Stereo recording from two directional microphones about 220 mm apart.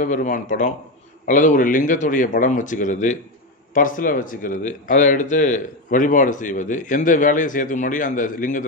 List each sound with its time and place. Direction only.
0.0 s speech: 35° left (ahead or behind)